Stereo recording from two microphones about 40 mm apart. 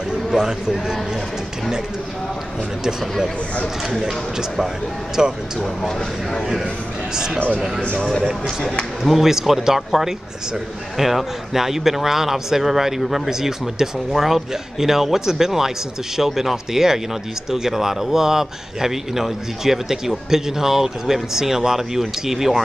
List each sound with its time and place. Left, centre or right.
0.3 s a man's voice: centre
4.0 s a man's voice: centre
5.8 s speech: centre
9.0 s a man's voice: centre